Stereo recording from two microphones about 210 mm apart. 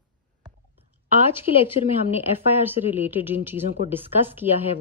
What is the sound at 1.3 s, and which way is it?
Speech, 10° right (ahead or behind).